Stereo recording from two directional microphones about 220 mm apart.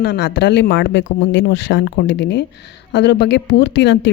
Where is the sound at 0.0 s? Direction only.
45° left (ahead or behind).